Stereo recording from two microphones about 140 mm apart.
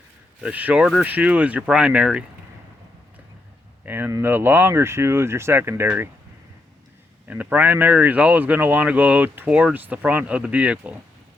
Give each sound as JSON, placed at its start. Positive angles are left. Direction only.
{"t": 0.4, "sound": "speech", "side_deg": -10}
{"t": 3.8, "sound": "speech", "side_deg": -15}
{"t": 7.3, "sound": "speech", "side_deg": -10}